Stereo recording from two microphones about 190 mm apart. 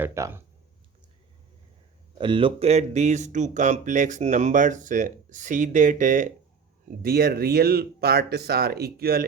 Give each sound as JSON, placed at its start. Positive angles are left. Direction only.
{"t": 0.0, "sound": "speech", "side_deg": -15}
{"t": 2.1, "sound": "speech", "side_deg": -25}
{"t": 7.0, "sound": "speech", "side_deg": -55}